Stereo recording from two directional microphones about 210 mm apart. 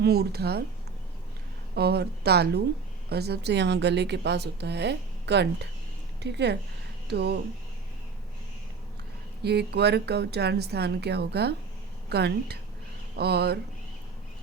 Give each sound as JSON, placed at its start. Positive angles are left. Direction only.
{"t": 0.0, "sound": "a woman's voice", "side_deg": -50}
{"t": 1.7, "sound": "a woman's voice", "side_deg": -50}
{"t": 9.4, "sound": "a woman's voice", "side_deg": -50}